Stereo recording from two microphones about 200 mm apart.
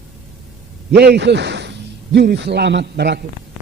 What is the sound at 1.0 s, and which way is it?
A man's voice, 55° right (ahead or behind).